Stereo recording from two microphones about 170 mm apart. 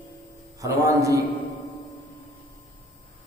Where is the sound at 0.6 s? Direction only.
20° right (ahead or behind).